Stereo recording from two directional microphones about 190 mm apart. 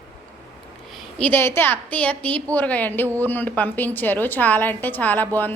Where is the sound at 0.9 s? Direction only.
5° left (ahead or behind).